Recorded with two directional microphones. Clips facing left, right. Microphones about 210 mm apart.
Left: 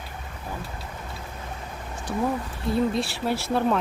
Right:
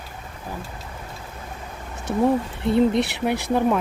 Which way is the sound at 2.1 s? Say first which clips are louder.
Right 7 dB; 25° right (ahead or behind).